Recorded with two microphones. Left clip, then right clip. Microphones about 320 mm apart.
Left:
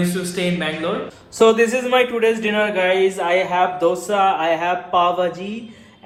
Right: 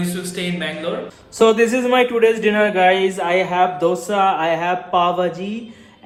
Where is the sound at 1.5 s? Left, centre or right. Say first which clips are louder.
Right 1 dB; centre.